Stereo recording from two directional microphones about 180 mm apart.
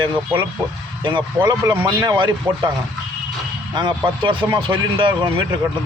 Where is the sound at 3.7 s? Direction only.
25° right (ahead or behind).